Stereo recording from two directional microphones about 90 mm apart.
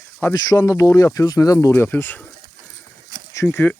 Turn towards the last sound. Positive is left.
turn(degrees=20)  # may be behind; listen again after turning